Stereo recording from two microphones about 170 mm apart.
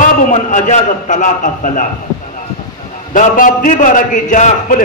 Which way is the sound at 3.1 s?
50° left (ahead or behind).